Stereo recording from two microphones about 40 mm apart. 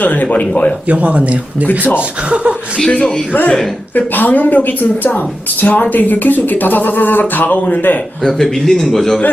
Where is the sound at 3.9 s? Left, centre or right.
Left.